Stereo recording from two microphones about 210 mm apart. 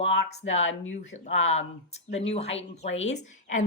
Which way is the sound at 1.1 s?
30° left (ahead or behind).